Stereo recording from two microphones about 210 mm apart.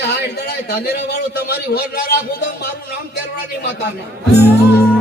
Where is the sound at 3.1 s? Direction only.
50° left (ahead or behind).